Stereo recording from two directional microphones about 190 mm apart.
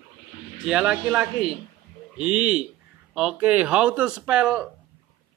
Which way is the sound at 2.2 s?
35° right (ahead or behind).